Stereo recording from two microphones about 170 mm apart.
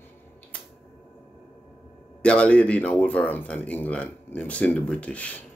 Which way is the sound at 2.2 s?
5° left (ahead or behind).